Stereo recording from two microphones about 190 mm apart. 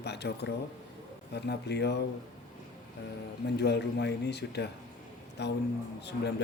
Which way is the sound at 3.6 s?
60° left (ahead or behind).